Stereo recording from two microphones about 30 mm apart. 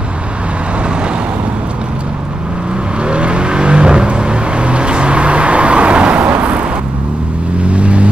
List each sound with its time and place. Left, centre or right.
3.0 s vehicle: right
7.6 s vehicle: right